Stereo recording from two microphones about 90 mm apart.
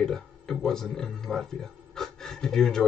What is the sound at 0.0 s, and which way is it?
Speech, 5° left (ahead or behind).